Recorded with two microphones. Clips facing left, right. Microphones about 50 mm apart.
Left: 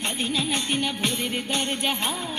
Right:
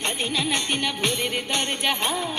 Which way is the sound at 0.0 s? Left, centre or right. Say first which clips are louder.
Right 1 dB; right.